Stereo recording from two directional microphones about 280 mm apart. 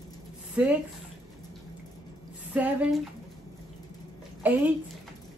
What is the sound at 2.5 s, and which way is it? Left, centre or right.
Female singing, centre.